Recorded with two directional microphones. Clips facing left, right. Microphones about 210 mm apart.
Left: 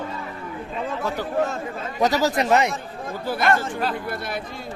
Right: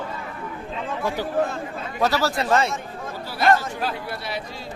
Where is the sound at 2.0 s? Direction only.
20° left (ahead or behind).